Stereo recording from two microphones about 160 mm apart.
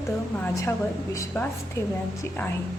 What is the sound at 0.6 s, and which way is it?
A woman's voice, 20° left (ahead or behind).